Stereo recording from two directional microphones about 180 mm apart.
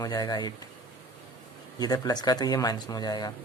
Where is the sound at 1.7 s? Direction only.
20° left (ahead or behind).